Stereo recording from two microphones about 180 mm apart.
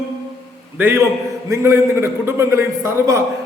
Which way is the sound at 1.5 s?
15° right (ahead or behind).